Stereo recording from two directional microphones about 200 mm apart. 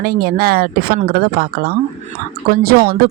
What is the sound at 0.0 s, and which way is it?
Speech, 50° right (ahead or behind).